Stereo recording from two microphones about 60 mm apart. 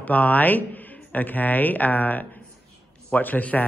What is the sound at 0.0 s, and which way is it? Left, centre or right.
A man's voice, left.